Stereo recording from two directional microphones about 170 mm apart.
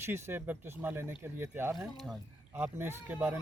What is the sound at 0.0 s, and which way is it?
Speech, 15° right (ahead or behind).